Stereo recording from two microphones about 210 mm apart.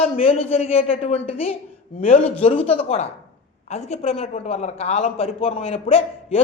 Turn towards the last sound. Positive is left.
turn(degrees=30)  # may be behind; listen again after turning